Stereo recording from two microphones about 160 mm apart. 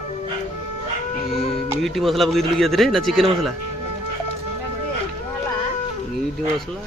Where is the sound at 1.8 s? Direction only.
Centre (ahead or behind).